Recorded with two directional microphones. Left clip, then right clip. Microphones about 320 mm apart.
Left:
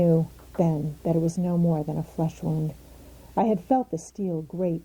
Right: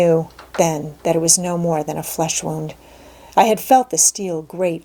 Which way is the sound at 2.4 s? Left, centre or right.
Centre.